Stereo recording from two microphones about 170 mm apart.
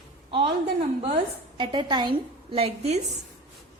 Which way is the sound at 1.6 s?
25° right (ahead or behind).